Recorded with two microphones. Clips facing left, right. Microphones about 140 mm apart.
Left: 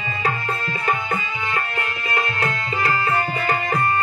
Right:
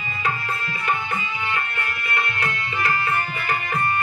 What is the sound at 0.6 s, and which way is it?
Music, 40° left (ahead or behind).